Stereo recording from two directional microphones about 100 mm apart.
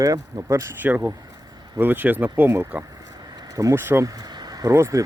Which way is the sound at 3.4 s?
35° right (ahead or behind).